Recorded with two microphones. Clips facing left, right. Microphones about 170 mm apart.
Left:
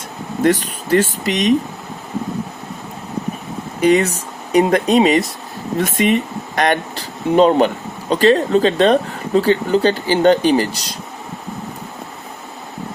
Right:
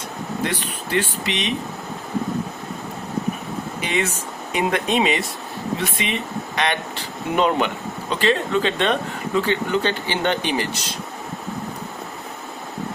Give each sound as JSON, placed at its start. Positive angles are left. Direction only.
{"t": 0.4, "sound": "speech", "side_deg": 40}
{"t": 3.8, "sound": "speech", "side_deg": 40}